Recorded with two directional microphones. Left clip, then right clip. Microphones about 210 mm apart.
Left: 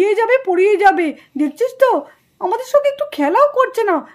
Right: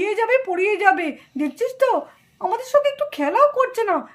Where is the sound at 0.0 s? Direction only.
35° left (ahead or behind).